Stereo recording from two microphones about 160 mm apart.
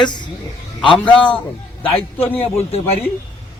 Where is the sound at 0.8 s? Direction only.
30° left (ahead or behind).